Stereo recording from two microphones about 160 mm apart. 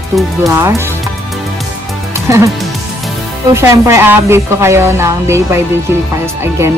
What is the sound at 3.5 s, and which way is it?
Speech, 15° right (ahead or behind).